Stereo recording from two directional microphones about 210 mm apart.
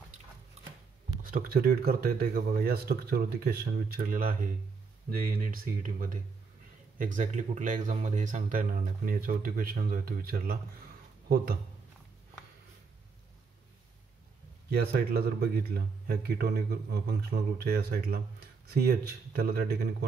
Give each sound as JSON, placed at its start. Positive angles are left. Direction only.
{"t": 1.3, "sound": "speech", "side_deg": -45}
{"t": 14.7, "sound": "speech", "side_deg": -50}